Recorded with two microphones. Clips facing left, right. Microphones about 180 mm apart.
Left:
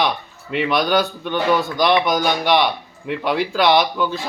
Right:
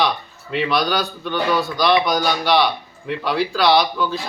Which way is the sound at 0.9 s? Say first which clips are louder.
Left 3 dB; 20° left (ahead or behind).